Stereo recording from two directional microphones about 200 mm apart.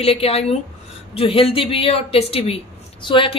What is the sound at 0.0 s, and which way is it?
A woman's voice, 30° left (ahead or behind).